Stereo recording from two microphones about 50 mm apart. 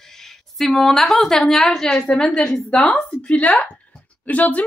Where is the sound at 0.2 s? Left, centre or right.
Centre.